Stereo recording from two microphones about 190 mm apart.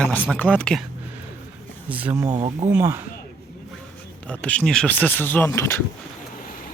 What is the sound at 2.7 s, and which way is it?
Speech, 10° right (ahead or behind).